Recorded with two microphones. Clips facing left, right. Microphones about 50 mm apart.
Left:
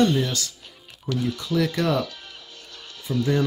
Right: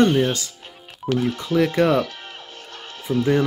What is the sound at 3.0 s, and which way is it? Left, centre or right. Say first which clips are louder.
Speech: right 4 dB; right.